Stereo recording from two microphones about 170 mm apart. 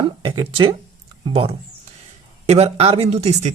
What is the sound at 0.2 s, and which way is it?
Speech, 30° right (ahead or behind).